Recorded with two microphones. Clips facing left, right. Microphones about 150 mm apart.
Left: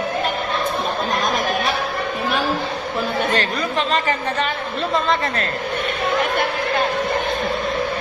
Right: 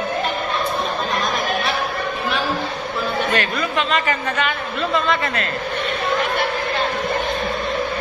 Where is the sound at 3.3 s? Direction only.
35° left (ahead or behind).